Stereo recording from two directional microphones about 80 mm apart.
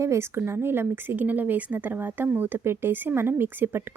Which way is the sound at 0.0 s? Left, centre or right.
Right.